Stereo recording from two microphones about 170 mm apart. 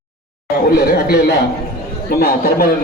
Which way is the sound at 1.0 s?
70° left (ahead or behind).